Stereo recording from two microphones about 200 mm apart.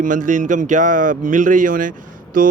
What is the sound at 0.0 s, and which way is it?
Speech, 40° right (ahead or behind).